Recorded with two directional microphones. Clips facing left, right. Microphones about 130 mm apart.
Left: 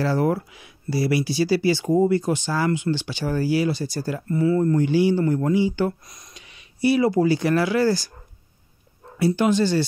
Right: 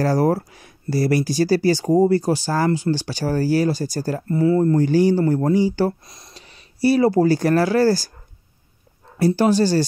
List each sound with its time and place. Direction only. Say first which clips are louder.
0.0 s speech: right 3 dB; 40° right (ahead or behind)
9.2 s speech: right 3 dB; 35° right (ahead or behind)